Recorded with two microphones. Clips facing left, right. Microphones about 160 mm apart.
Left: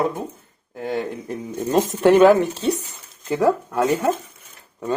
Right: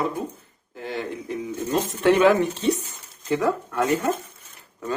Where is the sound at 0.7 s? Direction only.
45° left (ahead or behind).